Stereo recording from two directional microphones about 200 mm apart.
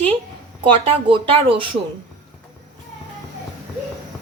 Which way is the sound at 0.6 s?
25° right (ahead or behind).